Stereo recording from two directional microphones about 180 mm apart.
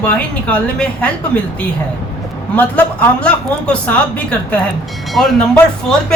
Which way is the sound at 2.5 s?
10° left (ahead or behind).